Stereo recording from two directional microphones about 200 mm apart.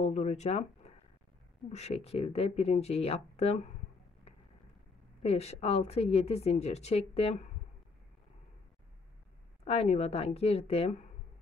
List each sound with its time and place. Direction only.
0.0 s a woman's voice: 35° left (ahead or behind)
5.2 s a woman's voice: 30° left (ahead or behind)
9.7 s a woman's voice: 30° left (ahead or behind)